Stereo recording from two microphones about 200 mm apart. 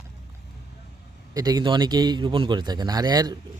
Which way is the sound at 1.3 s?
20° right (ahead or behind).